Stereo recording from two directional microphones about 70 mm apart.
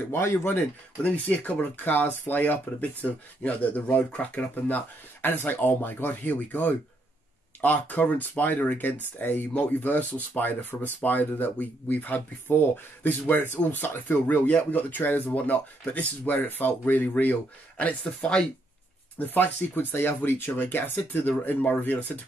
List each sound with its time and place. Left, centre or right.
0.1 s speech: left
1.0 s speech: left
19.1 s speech: left